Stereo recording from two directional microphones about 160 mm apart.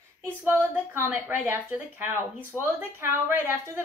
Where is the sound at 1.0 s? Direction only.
15° right (ahead or behind).